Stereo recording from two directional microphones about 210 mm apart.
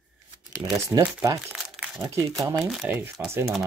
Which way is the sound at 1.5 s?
Centre (ahead or behind).